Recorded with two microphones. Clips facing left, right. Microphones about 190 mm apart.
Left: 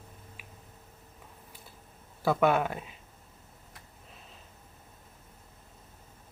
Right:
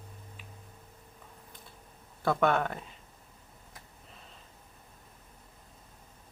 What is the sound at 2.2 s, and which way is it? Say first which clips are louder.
Speech: left 2 dB; 5° left (ahead or behind).